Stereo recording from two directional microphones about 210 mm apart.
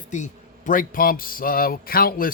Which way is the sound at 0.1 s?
35° left (ahead or behind).